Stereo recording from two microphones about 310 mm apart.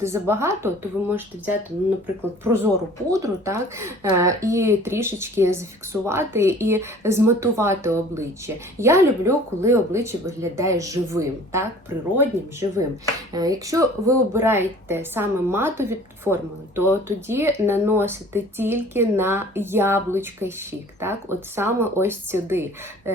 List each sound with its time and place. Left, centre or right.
0.0 s speech: centre
3.1 s speech: centre
23.1 s a sound: centre